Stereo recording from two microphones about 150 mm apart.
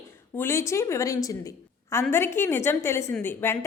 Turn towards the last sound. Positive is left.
turn(degrees=15)  # may be behind; listen again after turning